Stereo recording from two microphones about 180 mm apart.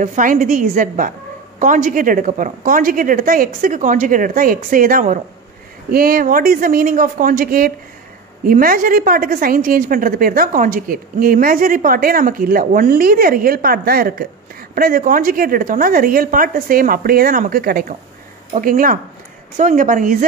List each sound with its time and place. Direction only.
0.0 s a woman's voice: 45° right (ahead or behind)